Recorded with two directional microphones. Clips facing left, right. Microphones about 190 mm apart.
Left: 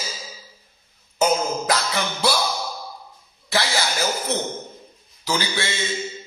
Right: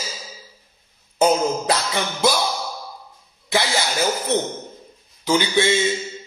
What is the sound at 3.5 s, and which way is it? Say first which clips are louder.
Speech: right 2 dB; 20° right (ahead or behind).